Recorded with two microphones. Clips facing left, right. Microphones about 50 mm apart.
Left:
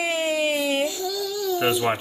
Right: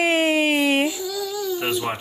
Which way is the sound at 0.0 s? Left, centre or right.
Right.